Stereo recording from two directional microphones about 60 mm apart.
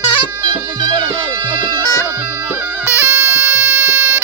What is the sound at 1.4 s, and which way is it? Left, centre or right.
Music, right.